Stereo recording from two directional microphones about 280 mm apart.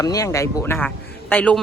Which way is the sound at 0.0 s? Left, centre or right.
Centre.